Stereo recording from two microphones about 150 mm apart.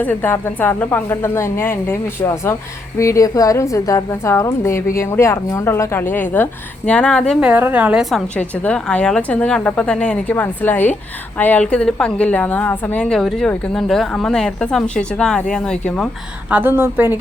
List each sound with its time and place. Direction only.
0.0 s a woman's voice: 10° left (ahead or behind)
7.3 s a woman's voice: 10° right (ahead or behind)
8.4 s a woman's voice: 10° left (ahead or behind)
16.5 s a woman's voice: 15° right (ahead or behind)